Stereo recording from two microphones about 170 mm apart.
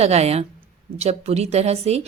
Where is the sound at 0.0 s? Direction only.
40° right (ahead or behind).